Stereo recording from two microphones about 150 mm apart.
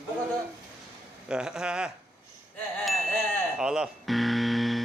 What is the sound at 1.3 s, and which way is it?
Speech, 5° right (ahead or behind).